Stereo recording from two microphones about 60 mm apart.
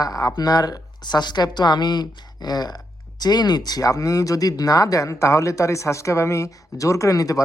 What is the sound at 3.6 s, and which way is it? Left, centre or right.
Speech, left.